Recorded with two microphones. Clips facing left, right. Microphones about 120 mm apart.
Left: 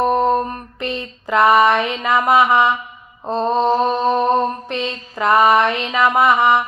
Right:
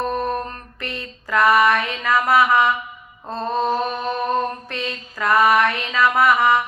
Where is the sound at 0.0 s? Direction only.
20° left (ahead or behind).